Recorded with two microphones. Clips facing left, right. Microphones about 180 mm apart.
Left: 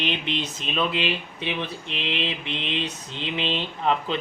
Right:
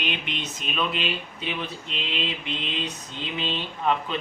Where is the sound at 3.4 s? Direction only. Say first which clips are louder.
Left 2 dB; 30° left (ahead or behind).